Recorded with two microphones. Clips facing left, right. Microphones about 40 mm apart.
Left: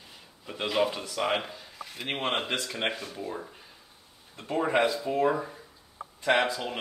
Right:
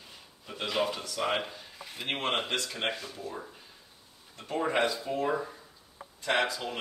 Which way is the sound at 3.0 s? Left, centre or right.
Left.